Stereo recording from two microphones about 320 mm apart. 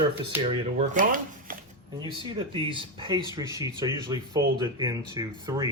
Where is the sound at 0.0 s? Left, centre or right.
Centre.